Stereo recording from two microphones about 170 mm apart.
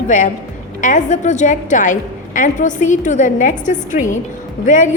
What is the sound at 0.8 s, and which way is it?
A woman's voice, 45° left (ahead or behind).